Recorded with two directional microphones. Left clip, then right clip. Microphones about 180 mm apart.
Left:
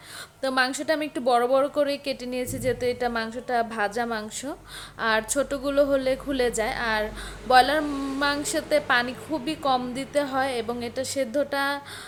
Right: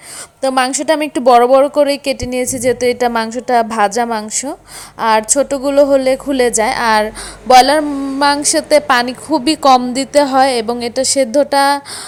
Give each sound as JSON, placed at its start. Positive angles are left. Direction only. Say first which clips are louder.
{"t": 0.4, "sound": "a woman's voice", "louder": "right 11 dB", "side_deg": -25}
{"t": 6.6, "sound": "a woman's voice", "louder": "right 13 dB", "side_deg": -40}